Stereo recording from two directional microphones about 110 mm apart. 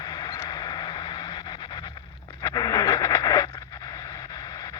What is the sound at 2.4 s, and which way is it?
Radio, 35° left (ahead or behind).